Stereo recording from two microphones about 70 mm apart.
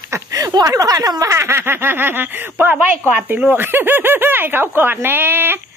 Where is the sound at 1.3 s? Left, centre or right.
Right.